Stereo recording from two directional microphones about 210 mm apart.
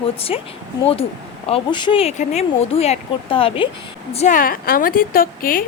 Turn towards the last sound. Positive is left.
turn(degrees=40)  # may be behind; listen again after turning